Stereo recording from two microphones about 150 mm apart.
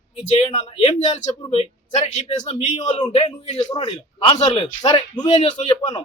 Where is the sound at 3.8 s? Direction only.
45° left (ahead or behind).